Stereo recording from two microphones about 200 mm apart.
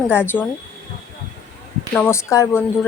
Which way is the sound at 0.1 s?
10° left (ahead or behind).